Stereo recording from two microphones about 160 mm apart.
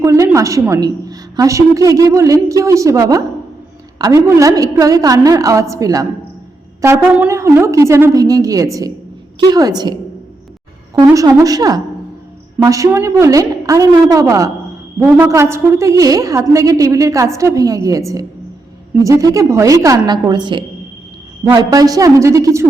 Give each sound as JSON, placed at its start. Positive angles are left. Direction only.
{"t": 0.0, "sound": "a woman's voice", "side_deg": -20}
{"t": 11.0, "sound": "a woman's voice", "side_deg": -20}